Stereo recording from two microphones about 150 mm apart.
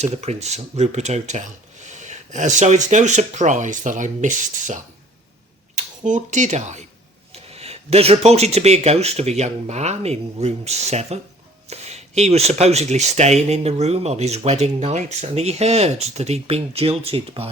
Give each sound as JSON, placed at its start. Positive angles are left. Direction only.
{"t": 0.0, "sound": "speech", "side_deg": -45}